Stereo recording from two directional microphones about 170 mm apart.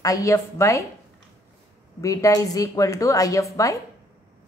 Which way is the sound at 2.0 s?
20° left (ahead or behind).